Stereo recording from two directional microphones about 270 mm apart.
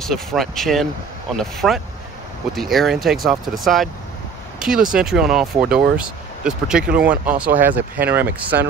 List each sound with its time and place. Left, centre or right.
0.0 s speech: centre